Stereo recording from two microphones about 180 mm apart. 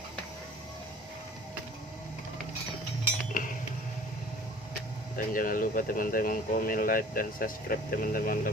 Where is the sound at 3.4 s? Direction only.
50° left (ahead or behind).